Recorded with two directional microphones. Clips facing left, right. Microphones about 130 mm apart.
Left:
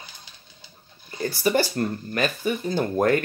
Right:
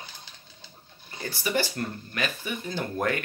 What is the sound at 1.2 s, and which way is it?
Speech, 40° left (ahead or behind).